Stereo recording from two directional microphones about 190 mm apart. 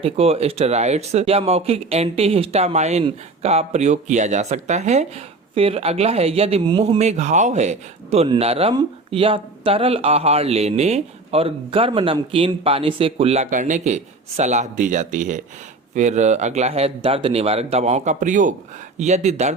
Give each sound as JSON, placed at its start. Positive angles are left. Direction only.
{"t": 0.0, "sound": "speech", "side_deg": -30}